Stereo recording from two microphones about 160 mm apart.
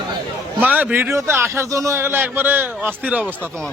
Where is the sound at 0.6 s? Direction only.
10° right (ahead or behind).